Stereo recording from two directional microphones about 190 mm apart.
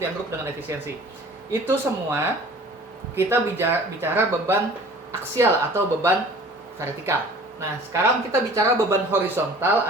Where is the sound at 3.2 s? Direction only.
10° right (ahead or behind).